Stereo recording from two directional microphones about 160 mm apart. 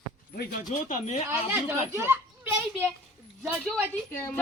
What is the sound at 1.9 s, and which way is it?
A child's voice, 15° right (ahead or behind).